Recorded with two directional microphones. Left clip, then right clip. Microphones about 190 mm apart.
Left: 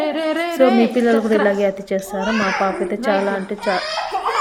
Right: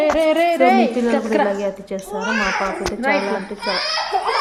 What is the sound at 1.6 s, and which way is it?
Speech, 15° left (ahead or behind).